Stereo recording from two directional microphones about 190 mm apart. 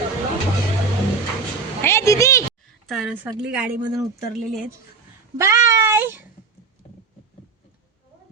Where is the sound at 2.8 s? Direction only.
Centre (ahead or behind).